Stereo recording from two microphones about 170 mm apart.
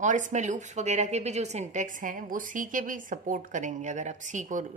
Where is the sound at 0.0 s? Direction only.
45° right (ahead or behind).